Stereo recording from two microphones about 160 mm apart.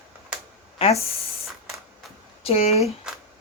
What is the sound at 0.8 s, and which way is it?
Speech, 40° left (ahead or behind).